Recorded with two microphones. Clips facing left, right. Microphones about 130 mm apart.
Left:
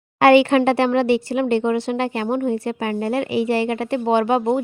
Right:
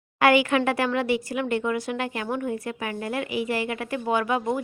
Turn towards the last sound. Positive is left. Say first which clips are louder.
# left 7 dB
turn(degrees=30)  # may be behind; listen again after turning